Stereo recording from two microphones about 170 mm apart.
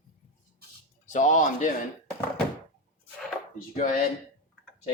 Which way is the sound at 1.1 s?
45° left (ahead or behind).